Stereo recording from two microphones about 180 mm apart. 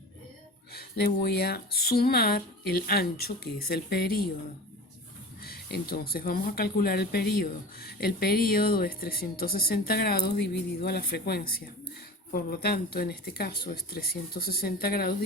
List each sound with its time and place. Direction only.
0.7 s speech: 60° left (ahead or behind)
5.4 s speech: 60° left (ahead or behind)